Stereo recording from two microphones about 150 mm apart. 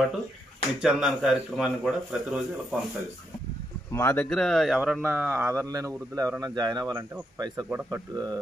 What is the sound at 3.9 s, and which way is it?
Speech, 15° left (ahead or behind).